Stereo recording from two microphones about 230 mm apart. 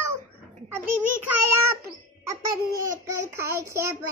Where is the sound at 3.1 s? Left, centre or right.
Centre.